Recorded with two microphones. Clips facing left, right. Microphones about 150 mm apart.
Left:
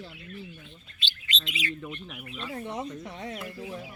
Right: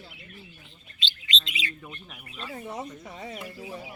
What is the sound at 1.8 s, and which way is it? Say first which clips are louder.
Speech: left 5 dB; centre (ahead or behind).